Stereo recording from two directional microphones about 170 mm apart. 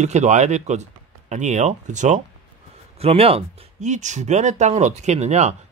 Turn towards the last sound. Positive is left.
turn(degrees=-40)  # may be behind; listen again after turning